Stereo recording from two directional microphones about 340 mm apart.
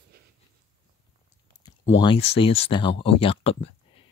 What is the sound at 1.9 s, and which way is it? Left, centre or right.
Speech, centre.